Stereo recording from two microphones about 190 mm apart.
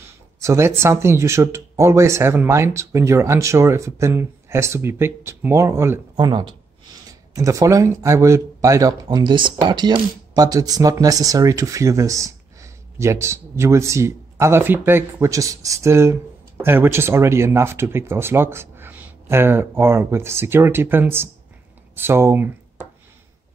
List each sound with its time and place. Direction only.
0.4 s speech: 15° right (ahead or behind)